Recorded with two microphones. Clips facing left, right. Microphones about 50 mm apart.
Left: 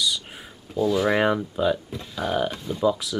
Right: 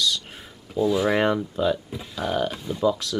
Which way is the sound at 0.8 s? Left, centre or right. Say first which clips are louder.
Even; centre.